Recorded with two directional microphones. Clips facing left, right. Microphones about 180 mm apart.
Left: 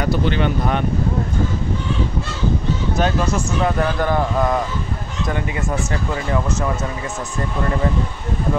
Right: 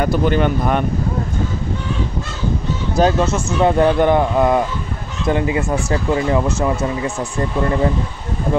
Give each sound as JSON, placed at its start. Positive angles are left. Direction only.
{"t": 0.0, "sound": "speech", "side_deg": -50}
{"t": 3.0, "sound": "speech", "side_deg": -30}